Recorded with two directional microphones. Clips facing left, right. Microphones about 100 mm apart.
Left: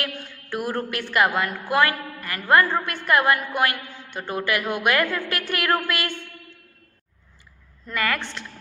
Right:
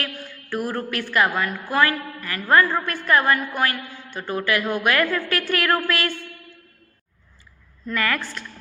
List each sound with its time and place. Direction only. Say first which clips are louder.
0.5 s a woman's voice: right 1 dB; 25° left (ahead or behind)
4.6 s a woman's voice: right 1 dB; 10° left (ahead or behind)
7.9 s a woman's voice: right 1 dB; 20° left (ahead or behind)